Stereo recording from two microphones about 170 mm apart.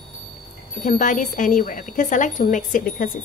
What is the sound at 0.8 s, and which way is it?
A woman's voice, 45° left (ahead or behind).